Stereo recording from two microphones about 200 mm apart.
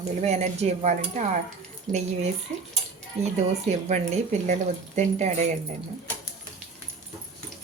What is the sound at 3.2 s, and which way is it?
A woman's voice, 30° right (ahead or behind).